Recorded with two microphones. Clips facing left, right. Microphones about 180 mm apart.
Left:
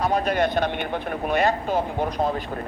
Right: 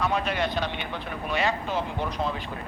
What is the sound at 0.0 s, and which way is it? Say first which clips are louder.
Speech: left 5 dB; 40° left (ahead or behind).